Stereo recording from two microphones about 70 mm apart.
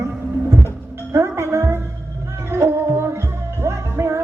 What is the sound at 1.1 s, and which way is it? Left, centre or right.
Music, right.